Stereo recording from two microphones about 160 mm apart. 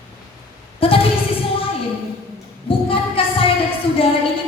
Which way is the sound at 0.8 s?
35° left (ahead or behind).